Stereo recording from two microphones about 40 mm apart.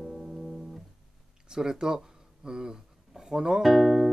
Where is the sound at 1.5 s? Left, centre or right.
Centre.